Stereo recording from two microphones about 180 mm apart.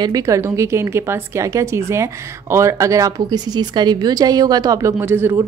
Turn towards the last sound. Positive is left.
turn(degrees=-15)  # may be behind; listen again after turning